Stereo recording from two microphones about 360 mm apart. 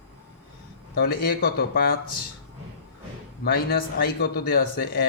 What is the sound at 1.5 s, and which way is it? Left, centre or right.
Speech, left.